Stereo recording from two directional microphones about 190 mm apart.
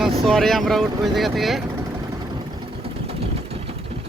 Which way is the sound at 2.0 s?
20° right (ahead or behind).